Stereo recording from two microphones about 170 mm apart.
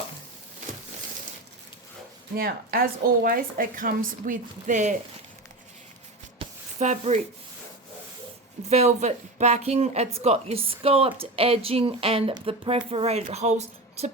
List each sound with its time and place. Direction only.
2.3 s a woman's voice: 60° right (ahead or behind); by 4.9 s 45° right (ahead or behind)
6.4 s a sound: 30° right (ahead or behind)
6.7 s speech: 45° right (ahead or behind)
8.7 s speech: 40° right (ahead or behind)